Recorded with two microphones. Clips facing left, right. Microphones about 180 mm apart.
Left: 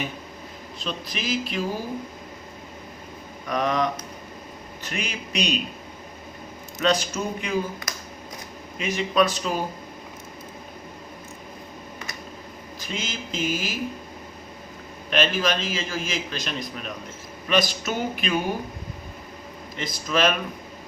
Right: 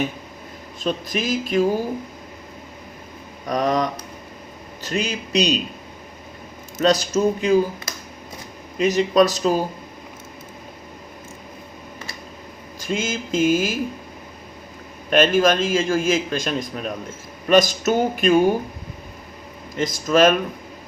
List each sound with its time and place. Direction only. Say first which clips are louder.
0.8 s a man's voice: right 8 dB; 50° right (ahead or behind)
3.4 s speech: right 3 dB; 40° right (ahead or behind)
6.7 s speech: right 5 dB; 40° right (ahead or behind)
12.8 s a man's voice: right 8 dB; 50° right (ahead or behind)
15.1 s a man's voice: right 7 dB; 50° right (ahead or behind)
19.7 s a man's voice: right 7 dB; 45° right (ahead or behind)